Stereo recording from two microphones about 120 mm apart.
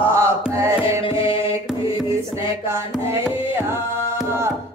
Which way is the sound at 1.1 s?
45° left (ahead or behind).